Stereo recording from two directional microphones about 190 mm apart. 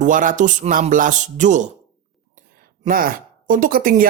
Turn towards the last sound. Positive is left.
turn(degrees=-50)  # may be behind; listen again after turning